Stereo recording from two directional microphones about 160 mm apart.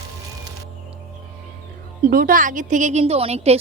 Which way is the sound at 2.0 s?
60° right (ahead or behind).